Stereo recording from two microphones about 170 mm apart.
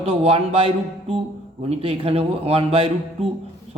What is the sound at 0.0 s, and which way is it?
Speech, 35° right (ahead or behind).